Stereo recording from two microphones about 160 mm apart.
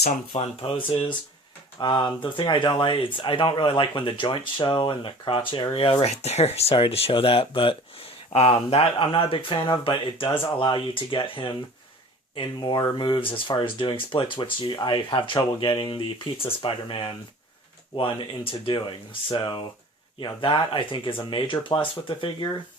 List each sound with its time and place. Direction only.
0.3 s speech: 35° left (ahead or behind)